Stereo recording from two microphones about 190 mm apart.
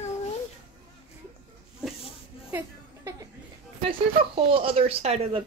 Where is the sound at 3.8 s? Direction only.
30° right (ahead or behind).